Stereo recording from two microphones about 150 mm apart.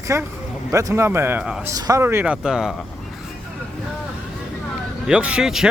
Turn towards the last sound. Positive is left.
turn(degrees=-5)  # may be behind; listen again after turning